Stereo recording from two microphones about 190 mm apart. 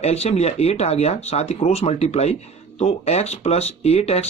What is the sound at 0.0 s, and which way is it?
Speech, 35° left (ahead or behind).